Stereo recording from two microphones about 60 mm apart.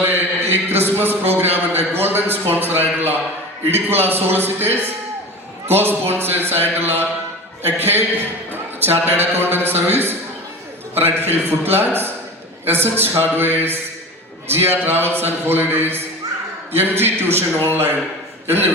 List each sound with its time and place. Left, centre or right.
0.0 s a man's voice: right